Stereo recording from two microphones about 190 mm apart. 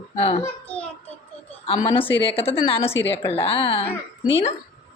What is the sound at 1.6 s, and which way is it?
A woman's voice, 30° left (ahead or behind).